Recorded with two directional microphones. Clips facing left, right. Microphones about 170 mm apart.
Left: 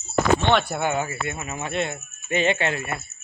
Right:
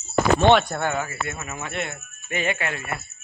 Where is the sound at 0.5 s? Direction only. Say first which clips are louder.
Right 1 dB; 5° left (ahead or behind).